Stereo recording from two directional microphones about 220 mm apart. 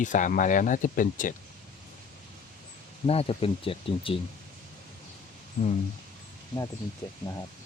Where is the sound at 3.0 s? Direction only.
25° left (ahead or behind).